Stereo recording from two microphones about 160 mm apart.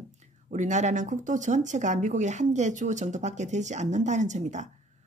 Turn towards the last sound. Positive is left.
turn(degrees=-50)  # may be behind; listen again after turning